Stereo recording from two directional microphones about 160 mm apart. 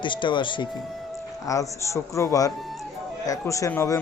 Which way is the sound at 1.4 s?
20° left (ahead or behind).